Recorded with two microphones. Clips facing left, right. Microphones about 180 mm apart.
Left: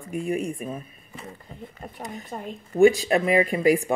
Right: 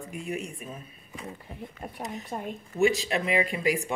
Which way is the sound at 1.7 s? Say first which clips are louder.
Even; centre (ahead or behind).